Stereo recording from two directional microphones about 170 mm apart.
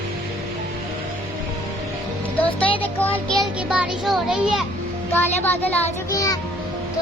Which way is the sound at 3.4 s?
5° right (ahead or behind).